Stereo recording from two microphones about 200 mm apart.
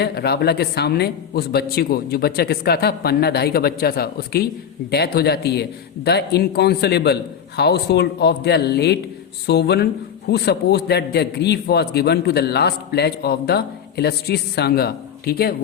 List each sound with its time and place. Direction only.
0.0 s a man's voice: 55° left (ahead or behind)